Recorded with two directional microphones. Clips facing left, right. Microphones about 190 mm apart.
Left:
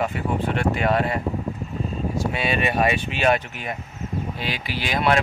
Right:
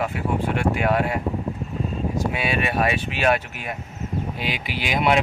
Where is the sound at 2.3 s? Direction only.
5° right (ahead or behind).